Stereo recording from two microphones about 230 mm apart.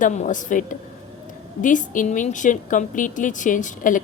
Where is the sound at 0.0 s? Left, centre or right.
Left.